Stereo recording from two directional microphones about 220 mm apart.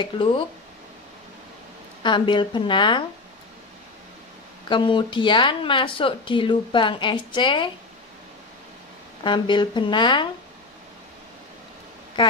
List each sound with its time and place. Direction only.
0.0 s speech: 20° left (ahead or behind)
2.0 s speech: 20° left (ahead or behind)
4.6 s speech: 20° left (ahead or behind)
9.2 s speech: 20° left (ahead or behind)
12.2 s speech: 20° left (ahead or behind)